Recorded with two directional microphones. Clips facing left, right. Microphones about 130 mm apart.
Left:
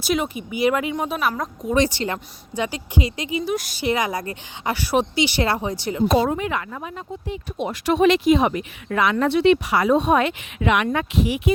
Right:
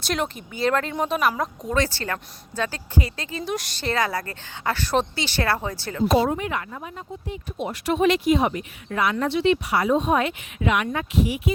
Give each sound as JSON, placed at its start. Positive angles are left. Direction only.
{"t": 0.0, "sound": "a woman's voice", "side_deg": 5}
{"t": 0.9, "sound": "speech", "side_deg": 0}
{"t": 1.7, "sound": "a woman's voice", "side_deg": 15}
{"t": 3.4, "sound": "speech", "side_deg": 0}
{"t": 3.8, "sound": "a woman's voice", "side_deg": 15}
{"t": 6.5, "sound": "speech", "side_deg": 90}